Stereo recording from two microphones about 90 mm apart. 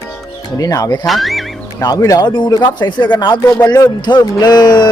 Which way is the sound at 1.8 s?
40° left (ahead or behind).